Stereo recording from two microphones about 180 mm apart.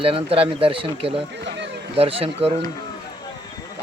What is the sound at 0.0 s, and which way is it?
Speech, 30° right (ahead or behind).